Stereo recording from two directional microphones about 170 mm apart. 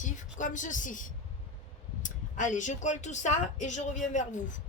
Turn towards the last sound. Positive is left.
turn(degrees=45)  # may be behind; listen again after turning